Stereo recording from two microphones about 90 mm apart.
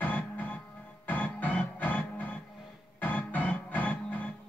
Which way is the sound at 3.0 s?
15° left (ahead or behind).